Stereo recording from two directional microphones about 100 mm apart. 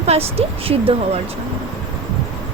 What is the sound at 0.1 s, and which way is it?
A woman's voice, 90° right.